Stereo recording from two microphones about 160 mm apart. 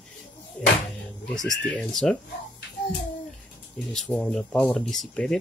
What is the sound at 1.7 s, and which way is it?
Speech, 5° left (ahead or behind).